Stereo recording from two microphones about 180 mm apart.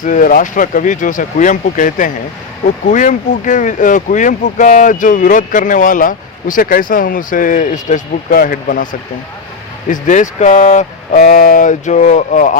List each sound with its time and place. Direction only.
0.0 s speech: 50° left (ahead or behind)